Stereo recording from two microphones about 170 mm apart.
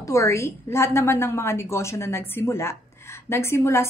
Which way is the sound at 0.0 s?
15° left (ahead or behind).